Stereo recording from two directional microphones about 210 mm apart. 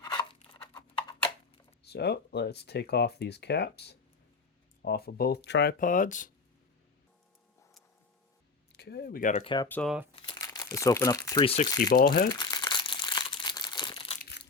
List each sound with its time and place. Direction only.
0.0 s a sound: 20° left (ahead or behind)
1.9 s speech: 50° left (ahead or behind)
5.8 s speech: 40° left (ahead or behind)
8.7 s speech: 50° left (ahead or behind)
9.4 s speech: 25° left (ahead or behind)
9.6 s speech: 5° left (ahead or behind)
10.2 s crumpling: 20° left (ahead or behind)
11.4 s speech: 30° left (ahead or behind)
11.9 s speech: 45° left (ahead or behind)
12.3 s crumpling: 20° left (ahead or behind)
14.2 s crushing: 50° left (ahead or behind)